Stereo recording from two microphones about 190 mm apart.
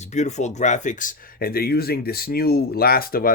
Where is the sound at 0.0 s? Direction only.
40° left (ahead or behind).